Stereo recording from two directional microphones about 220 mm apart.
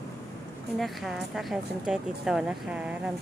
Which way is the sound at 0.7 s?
Centre (ahead or behind).